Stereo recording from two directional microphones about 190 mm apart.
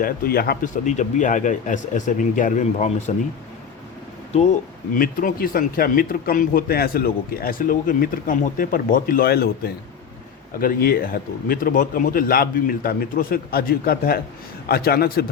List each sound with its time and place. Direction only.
0.0 s speech: 50° left (ahead or behind)
4.9 s speech: 50° left (ahead or behind)